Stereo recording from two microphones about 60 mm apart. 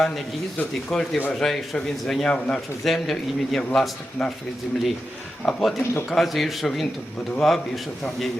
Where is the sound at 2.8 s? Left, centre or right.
Centre.